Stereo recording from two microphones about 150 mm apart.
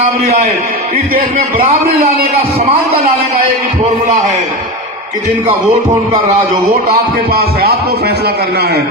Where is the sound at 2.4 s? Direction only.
40° right (ahead or behind).